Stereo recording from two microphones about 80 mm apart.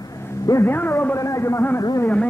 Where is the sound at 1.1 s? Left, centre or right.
Left.